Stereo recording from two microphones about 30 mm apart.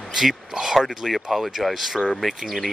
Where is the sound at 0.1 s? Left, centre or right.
Centre.